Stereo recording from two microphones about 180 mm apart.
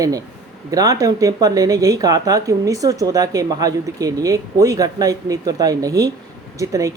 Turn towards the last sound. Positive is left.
turn(degrees=-20)  # may be behind; listen again after turning